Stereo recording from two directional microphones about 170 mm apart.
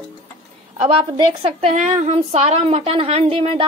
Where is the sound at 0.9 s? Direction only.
30° right (ahead or behind).